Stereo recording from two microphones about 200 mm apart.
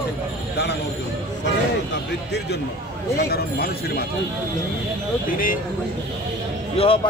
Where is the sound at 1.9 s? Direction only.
55° left (ahead or behind).